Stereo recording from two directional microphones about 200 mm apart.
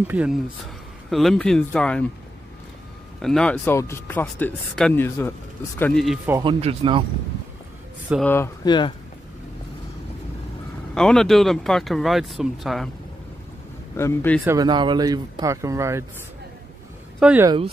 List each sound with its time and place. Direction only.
0.1 s speech: 5° right (ahead or behind)
3.2 s speech: 5° left (ahead or behind)
6.4 s speech: 30° right (ahead or behind)
8.1 s speech: 5° right (ahead or behind)
8.6 s speech: 20° left (ahead or behind)
11.0 s speech: 5° left (ahead or behind)
13.9 s speech: 10° left (ahead or behind)
14.4 s speech: 15° right (ahead or behind)
17.2 s speech: 5° right (ahead or behind)